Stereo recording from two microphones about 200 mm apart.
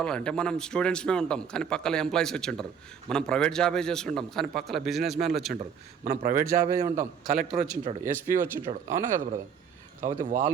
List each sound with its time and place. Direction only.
0.0 s a man's voice: 5° left (ahead or behind)
6.1 s a man's voice: 50° right (ahead or behind)
6.7 s speech: 15° right (ahead or behind)
7.3 s a man's voice: centre (ahead or behind)
10.0 s speech: 40° right (ahead or behind)